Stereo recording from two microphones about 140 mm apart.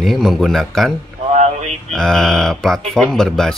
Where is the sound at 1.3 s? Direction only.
55° right (ahead or behind).